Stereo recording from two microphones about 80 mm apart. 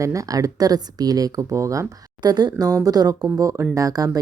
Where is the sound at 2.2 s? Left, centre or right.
Right.